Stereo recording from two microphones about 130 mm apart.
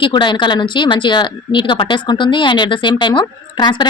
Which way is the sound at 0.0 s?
35° left (ahead or behind).